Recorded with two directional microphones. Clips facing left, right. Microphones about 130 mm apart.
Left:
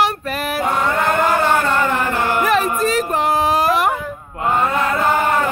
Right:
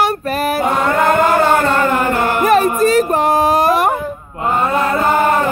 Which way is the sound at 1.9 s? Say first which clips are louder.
Right 3 dB; 50° right (ahead or behind).